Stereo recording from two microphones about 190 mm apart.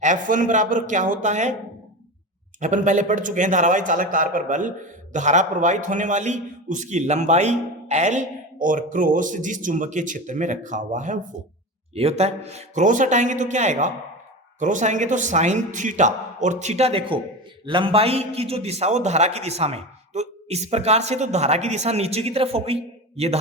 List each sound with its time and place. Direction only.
0.0 s speech: 40° right (ahead or behind)
2.6 s a man's voice: 40° right (ahead or behind)